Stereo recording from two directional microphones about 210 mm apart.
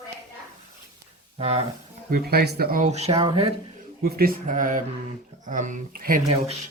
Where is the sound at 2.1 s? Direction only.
45° right (ahead or behind); by 3.5 s 25° right (ahead or behind).